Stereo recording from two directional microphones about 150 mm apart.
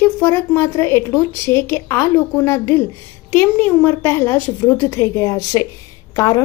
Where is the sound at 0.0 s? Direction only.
15° left (ahead or behind).